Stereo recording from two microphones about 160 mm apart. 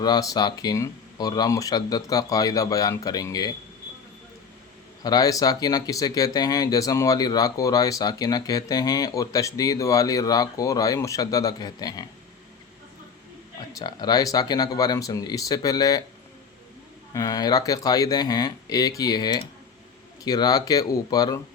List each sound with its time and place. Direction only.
0.0 s speech: 25° left (ahead or behind)
5.0 s speech: 25° left (ahead or behind)
13.7 s speech: 25° left (ahead or behind)
17.2 s speech: 20° left (ahead or behind)